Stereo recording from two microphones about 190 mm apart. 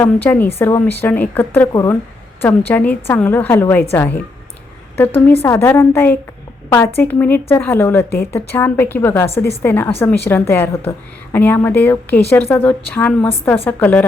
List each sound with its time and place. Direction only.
0.0 s a woman's voice: 10° left (ahead or behind)